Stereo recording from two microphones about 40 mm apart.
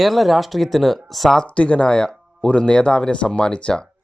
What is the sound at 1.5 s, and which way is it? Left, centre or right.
Speech, left.